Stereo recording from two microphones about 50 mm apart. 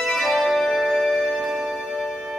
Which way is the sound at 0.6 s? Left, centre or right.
Centre.